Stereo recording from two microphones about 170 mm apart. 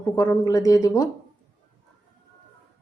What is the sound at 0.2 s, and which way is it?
Speech, 20° left (ahead or behind).